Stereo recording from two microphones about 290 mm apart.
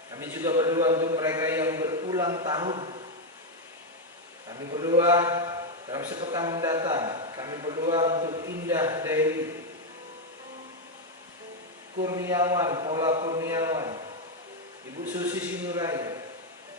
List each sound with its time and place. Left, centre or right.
0.1 s a man's voice: centre
4.5 s a man's voice: centre
12.0 s a man's voice: centre
15.1 s a man's voice: centre